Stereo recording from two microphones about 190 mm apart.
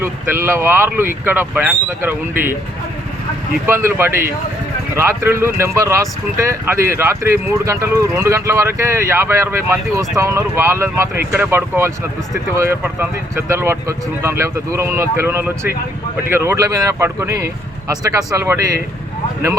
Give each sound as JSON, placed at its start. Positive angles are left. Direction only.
{"t": 0.0, "sound": "speech", "side_deg": -15}
{"t": 3.7, "sound": "speech", "side_deg": -15}